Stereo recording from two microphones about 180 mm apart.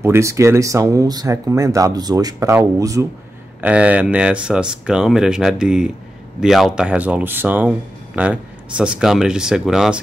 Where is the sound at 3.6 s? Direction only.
5° right (ahead or behind).